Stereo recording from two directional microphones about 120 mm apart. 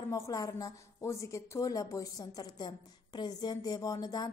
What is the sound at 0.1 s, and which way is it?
A woman's voice, 25° left (ahead or behind).